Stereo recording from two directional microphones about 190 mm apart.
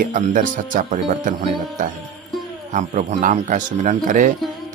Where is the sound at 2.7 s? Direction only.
40° right (ahead or behind).